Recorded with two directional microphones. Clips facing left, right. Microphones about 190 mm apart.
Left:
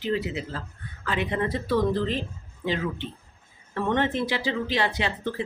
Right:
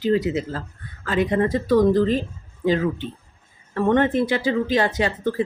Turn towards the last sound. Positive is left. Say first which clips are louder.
# right 6 dB
turn(degrees=-45)  # may be behind; listen again after turning